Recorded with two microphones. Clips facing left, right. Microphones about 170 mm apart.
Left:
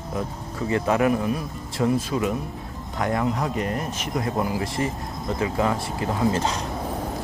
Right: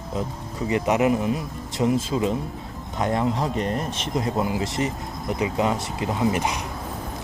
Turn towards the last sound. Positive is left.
turn(degrees=-15)  # may be behind; listen again after turning